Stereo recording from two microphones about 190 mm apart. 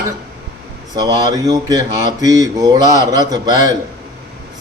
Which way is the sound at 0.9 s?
20° right (ahead or behind).